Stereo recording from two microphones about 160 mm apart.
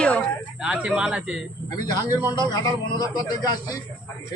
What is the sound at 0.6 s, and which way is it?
Speech, 5° right (ahead or behind).